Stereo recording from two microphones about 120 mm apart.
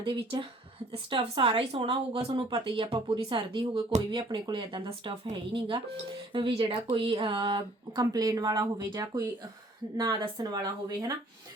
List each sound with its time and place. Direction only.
0.0 s speech: 45° right (ahead or behind); by 9.3 s 25° right (ahead or behind)
10.0 s speech: 40° right (ahead or behind)